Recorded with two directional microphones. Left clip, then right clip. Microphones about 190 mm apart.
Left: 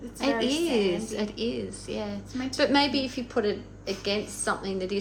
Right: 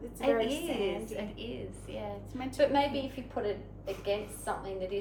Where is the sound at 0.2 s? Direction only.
20° left (ahead or behind).